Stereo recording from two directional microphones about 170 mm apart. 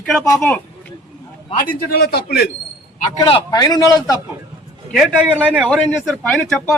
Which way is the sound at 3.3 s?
30° left (ahead or behind).